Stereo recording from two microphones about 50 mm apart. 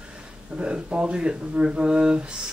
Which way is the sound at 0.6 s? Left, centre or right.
Right.